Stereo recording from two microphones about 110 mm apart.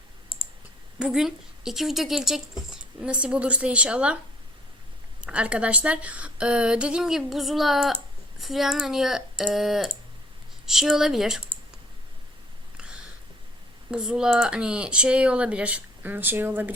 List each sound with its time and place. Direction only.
0.3 s clicking: 55° left (ahead or behind)
0.9 s speech: 5° right (ahead or behind)
5.2 s speech: 10° right (ahead or behind)
13.9 s speech: 5° right (ahead or behind)